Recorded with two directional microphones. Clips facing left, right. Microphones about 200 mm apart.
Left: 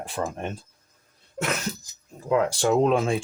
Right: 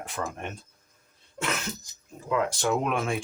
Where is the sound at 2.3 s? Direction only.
35° left (ahead or behind).